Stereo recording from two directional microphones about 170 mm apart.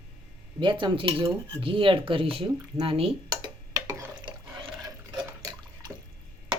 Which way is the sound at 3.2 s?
20° right (ahead or behind).